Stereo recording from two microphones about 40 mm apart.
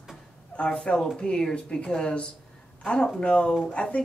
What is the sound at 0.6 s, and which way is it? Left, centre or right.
Speech, left.